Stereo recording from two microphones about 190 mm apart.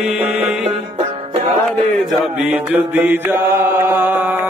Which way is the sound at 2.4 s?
5° right (ahead or behind).